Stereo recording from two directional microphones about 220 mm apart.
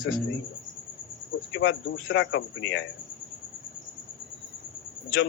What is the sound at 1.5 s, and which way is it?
Speech, 60° left (ahead or behind).